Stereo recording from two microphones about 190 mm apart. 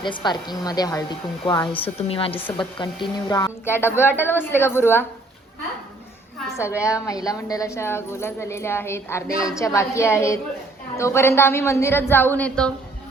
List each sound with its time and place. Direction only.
0.0 s a woman's voice: 25° left (ahead or behind)
3.2 s speech: 15° left (ahead or behind)
6.6 s speech: 15° left (ahead or behind)